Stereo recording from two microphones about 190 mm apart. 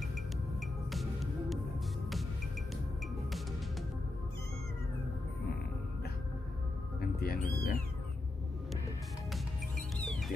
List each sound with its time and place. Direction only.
0.1 s music: centre (ahead or behind)
7.0 s speech: 55° left (ahead or behind)
9.3 s music: 5° left (ahead or behind)